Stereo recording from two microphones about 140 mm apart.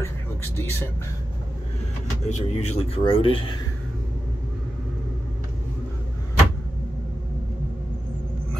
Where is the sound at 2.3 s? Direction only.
50° left (ahead or behind).